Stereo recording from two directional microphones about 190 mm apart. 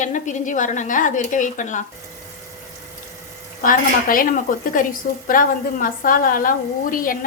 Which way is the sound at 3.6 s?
45° left (ahead or behind).